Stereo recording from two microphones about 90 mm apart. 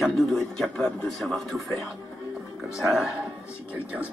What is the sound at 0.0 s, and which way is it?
Speech, 5° left (ahead or behind).